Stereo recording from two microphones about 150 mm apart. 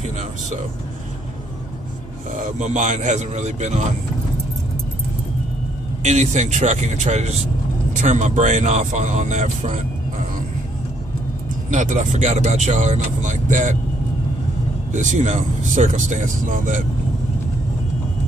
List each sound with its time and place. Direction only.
2.3 s speech: 55° right (ahead or behind)
6.0 s speech: 55° right (ahead or behind)
11.7 s speech: 55° right (ahead or behind)
14.9 s speech: 55° right (ahead or behind)